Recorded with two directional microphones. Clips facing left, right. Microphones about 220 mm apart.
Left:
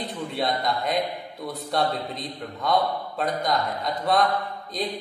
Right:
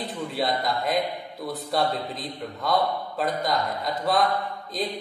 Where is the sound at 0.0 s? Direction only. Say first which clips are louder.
Even; centre (ahead or behind).